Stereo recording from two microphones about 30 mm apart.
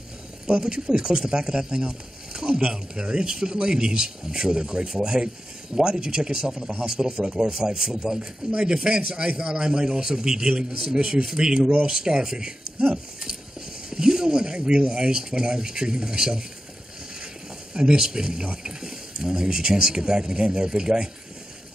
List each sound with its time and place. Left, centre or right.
0.5 s speech: right
12.9 s a sound: right
14.8 s speech: right
17.7 s speech: right